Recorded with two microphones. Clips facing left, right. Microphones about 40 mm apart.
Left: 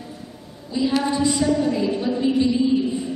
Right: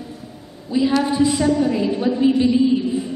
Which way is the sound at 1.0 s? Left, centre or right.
Centre.